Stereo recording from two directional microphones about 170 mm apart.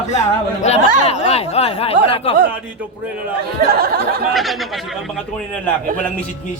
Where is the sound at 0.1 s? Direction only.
40° left (ahead or behind).